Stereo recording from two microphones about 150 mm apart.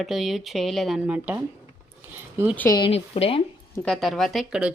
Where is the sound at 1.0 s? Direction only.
10° right (ahead or behind).